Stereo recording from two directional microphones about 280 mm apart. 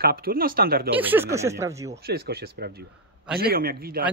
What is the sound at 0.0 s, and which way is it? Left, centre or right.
Speech, right.